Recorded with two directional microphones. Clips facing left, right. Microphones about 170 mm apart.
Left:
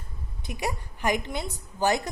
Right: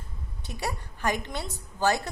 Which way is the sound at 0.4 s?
15° left (ahead or behind).